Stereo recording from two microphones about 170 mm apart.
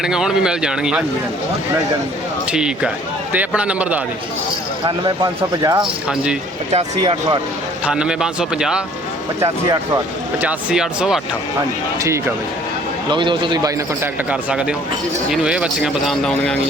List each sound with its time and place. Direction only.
0.0 s speech: 5° right (ahead or behind)
2.5 s a man's voice: 5° right (ahead or behind)
4.9 s a man's voice: 30° right (ahead or behind)
5.8 s speech: 5° right (ahead or behind)
6.9 s a man's voice: 25° right (ahead or behind)
7.9 s speech: 5° right (ahead or behind)
10.4 s speech: 5° right (ahead or behind)
13.1 s a man's voice: 30° right (ahead or behind)
14.3 s speech: 5° right (ahead or behind)